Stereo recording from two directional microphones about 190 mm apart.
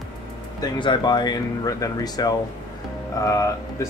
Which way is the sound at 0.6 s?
25° left (ahead or behind).